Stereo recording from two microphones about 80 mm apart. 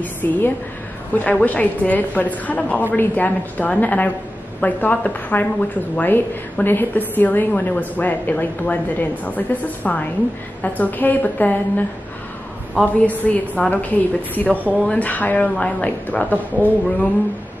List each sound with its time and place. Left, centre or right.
0.0 s a woman's voice: left
13.0 s a woman's voice: centre